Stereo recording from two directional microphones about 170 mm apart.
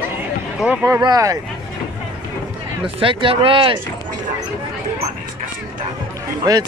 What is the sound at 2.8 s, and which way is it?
Speech, 30° right (ahead or behind).